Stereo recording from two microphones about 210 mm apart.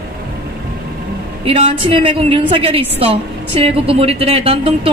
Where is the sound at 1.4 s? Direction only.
25° right (ahead or behind).